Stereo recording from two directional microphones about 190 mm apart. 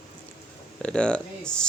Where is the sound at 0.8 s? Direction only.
5° left (ahead or behind).